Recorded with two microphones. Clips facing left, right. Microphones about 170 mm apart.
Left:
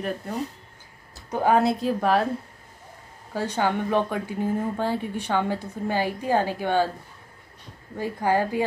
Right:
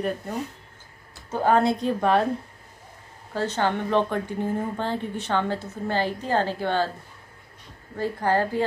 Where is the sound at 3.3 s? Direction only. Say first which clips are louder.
Even; 10° left (ahead or behind).